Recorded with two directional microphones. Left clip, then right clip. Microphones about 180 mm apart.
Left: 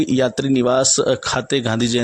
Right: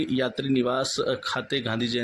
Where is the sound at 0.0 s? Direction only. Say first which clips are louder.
Left 9 dB; 45° left (ahead or behind).